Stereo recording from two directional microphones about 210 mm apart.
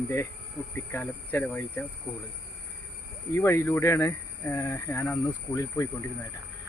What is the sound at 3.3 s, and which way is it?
Speech, 15° left (ahead or behind).